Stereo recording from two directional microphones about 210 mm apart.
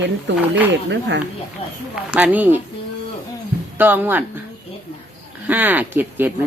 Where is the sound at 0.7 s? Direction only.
55° right (ahead or behind).